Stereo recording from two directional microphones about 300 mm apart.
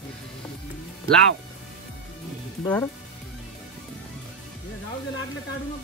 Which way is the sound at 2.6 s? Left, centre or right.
Centre.